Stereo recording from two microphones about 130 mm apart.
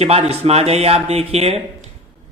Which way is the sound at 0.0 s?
50° right (ahead or behind).